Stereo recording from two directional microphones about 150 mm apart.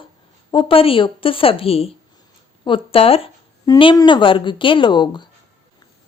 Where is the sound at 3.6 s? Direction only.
30° left (ahead or behind).